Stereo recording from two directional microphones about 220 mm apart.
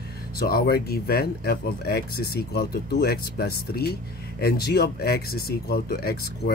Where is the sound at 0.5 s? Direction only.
45° left (ahead or behind).